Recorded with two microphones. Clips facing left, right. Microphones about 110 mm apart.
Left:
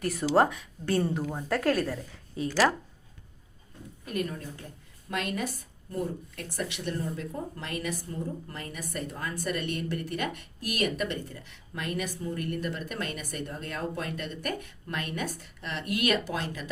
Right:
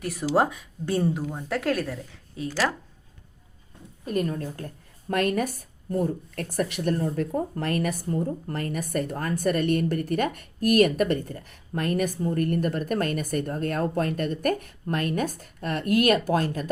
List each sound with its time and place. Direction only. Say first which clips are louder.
0.0 s a woman's voice: even; 5° right (ahead or behind)
4.0 s a woman's voice: right 6 dB; 40° right (ahead or behind)